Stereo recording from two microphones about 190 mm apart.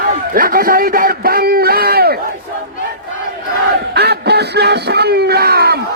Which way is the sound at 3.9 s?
60° right (ahead or behind).